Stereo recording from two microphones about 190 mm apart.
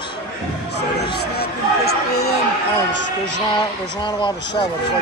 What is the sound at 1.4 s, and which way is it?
Speech, 60° left (ahead or behind).